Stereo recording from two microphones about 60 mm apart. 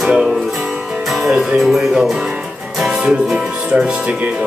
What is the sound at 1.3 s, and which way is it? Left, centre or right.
Speech, centre.